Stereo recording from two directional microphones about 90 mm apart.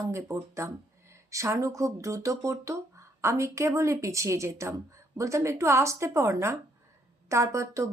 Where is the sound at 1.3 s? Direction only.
35° right (ahead or behind).